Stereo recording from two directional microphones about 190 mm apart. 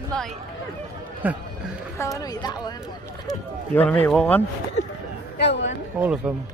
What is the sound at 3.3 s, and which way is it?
Run, 10° left (ahead or behind).